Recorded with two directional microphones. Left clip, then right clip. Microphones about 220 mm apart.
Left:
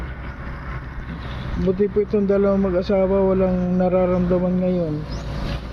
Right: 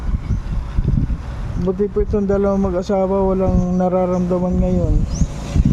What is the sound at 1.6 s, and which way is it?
Speech, 15° right (ahead or behind).